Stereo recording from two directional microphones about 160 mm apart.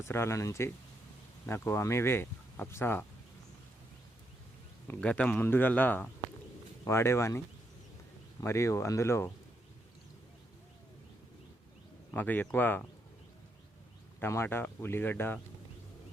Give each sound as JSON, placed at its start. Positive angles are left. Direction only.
{"t": 0.1, "sound": "speech", "side_deg": 15}
{"t": 4.9, "sound": "speech", "side_deg": 10}
{"t": 12.1, "sound": "speech", "side_deg": 10}
{"t": 14.2, "sound": "speech", "side_deg": 15}